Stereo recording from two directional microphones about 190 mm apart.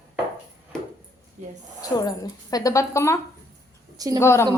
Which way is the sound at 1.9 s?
20° left (ahead or behind).